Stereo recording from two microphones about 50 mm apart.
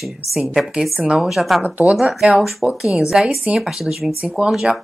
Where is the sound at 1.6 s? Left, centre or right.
Right.